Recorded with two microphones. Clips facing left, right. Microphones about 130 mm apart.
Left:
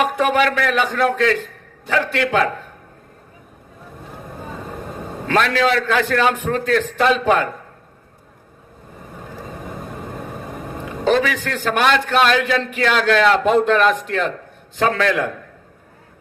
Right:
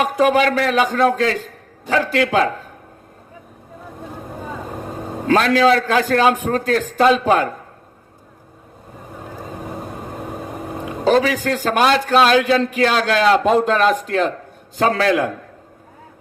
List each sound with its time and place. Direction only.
0.0 s a man's voice: 35° right (ahead or behind)
5.3 s a man's voice: 35° right (ahead or behind)
11.0 s a man's voice: 35° right (ahead or behind)